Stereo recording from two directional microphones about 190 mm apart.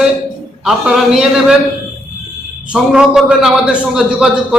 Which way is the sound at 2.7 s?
5° right (ahead or behind).